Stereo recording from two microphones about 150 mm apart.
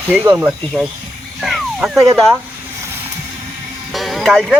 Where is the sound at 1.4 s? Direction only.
Centre (ahead or behind).